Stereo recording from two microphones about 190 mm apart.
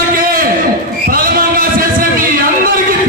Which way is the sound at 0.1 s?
50° right (ahead or behind).